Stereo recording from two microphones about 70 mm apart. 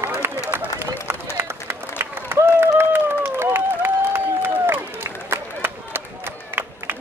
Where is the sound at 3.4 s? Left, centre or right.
Right.